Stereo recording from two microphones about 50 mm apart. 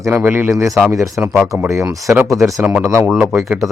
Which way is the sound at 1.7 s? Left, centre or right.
Right.